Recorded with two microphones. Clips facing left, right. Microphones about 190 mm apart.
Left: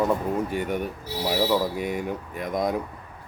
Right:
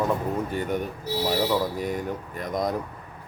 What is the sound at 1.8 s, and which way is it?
Speech, centre (ahead or behind).